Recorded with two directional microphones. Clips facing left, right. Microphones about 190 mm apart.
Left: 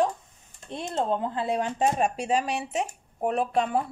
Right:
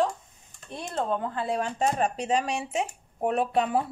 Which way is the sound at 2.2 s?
5° left (ahead or behind).